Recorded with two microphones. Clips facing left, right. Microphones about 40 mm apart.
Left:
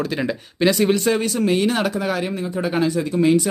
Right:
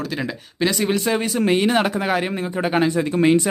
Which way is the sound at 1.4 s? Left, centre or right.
Right.